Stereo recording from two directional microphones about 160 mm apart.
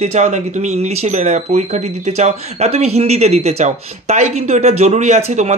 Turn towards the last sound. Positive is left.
turn(degrees=-45)  # may be behind; listen again after turning